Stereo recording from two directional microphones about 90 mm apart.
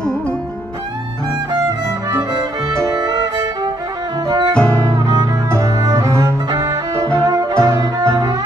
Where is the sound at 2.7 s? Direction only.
40° right (ahead or behind).